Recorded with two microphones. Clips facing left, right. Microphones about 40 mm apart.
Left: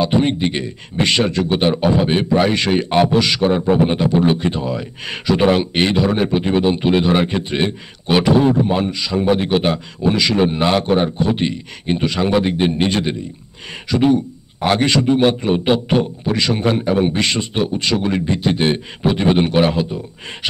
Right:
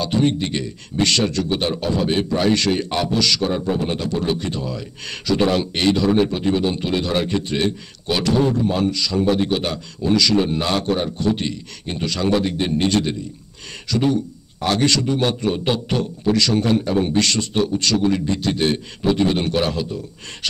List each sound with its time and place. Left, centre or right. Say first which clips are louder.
0.0 s speech: left 3 dB; left